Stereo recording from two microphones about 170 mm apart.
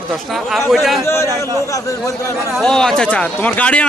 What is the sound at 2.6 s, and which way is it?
Speech, 5° left (ahead or behind).